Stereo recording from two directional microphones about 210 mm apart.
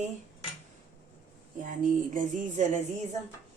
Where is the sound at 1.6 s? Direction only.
40° right (ahead or behind).